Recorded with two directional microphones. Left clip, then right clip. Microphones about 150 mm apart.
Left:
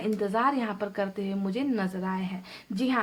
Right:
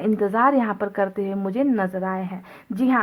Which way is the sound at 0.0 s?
30° right (ahead or behind).